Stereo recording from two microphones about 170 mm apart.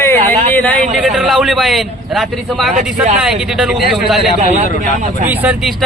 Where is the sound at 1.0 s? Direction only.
Centre (ahead or behind).